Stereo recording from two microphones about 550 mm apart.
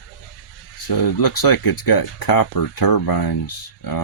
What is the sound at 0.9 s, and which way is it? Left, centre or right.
Speech, left.